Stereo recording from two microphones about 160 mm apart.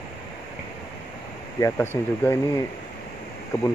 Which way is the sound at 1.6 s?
15° left (ahead or behind).